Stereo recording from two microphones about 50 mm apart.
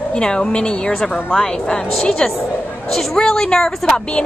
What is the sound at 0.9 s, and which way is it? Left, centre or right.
A woman's voice, centre.